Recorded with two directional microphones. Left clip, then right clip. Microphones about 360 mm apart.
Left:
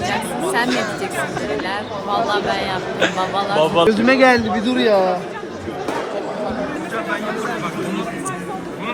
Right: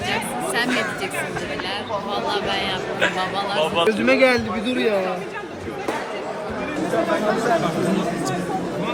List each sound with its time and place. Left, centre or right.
0.5 s speech: centre
2.1 s a man's voice: centre